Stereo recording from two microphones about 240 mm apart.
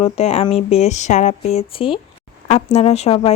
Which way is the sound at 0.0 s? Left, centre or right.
Left.